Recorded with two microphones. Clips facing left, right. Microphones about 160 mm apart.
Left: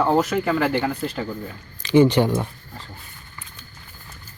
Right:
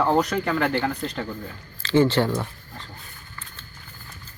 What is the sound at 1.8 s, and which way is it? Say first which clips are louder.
Speech: left 3 dB; 15° left (ahead or behind).